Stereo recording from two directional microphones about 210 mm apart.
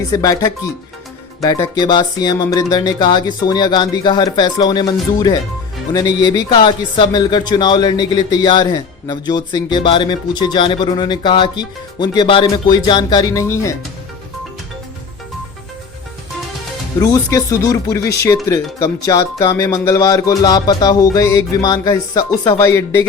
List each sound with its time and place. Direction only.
0.1 s music: 15° left (ahead or behind)
1.4 s speech: 15° left (ahead or behind)
17.0 s music: 15° left (ahead or behind)
18.0 s speech: 50° left (ahead or behind)
18.4 s music: 15° left (ahead or behind)